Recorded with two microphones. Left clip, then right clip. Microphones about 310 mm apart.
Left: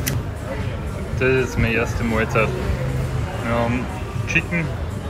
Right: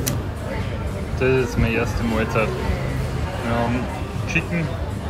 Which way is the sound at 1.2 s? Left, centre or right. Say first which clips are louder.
Left 1 dB; centre.